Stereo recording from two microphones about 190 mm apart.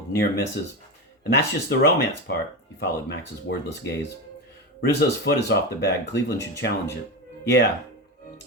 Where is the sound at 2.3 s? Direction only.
60° left (ahead or behind).